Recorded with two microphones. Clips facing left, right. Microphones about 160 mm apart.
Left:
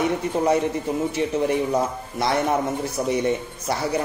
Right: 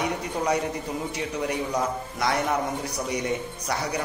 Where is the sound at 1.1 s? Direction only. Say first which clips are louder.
Left 7 dB; 25° left (ahead or behind).